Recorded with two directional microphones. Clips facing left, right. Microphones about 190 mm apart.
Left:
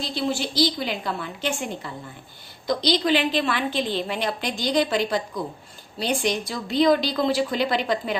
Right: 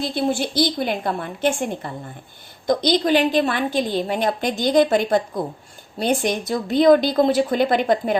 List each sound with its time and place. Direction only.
0.0 s a woman's voice: 55° right (ahead or behind)